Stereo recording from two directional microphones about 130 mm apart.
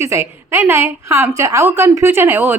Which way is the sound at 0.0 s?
20° right (ahead or behind).